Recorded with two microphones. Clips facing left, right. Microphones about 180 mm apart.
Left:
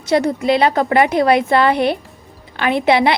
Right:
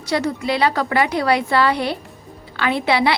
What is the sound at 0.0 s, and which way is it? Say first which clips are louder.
A woman's voice: left 5 dB; 20° left (ahead or behind).